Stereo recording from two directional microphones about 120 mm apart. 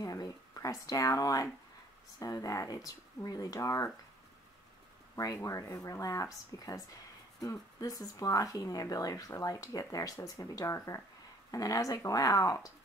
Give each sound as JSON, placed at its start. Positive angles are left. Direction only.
{"t": 0.0, "sound": "a sound", "side_deg": 30}
{"t": 2.1, "sound": "speech", "side_deg": 30}
{"t": 5.1, "sound": "speech", "side_deg": 30}